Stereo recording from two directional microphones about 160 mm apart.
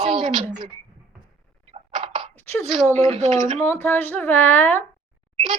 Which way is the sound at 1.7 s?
35° right (ahead or behind).